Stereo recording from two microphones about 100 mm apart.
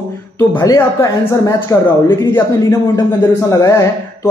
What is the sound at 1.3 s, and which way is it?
A man's voice, 35° left (ahead or behind).